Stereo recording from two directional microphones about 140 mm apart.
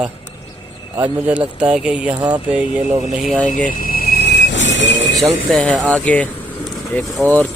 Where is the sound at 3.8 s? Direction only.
90° left.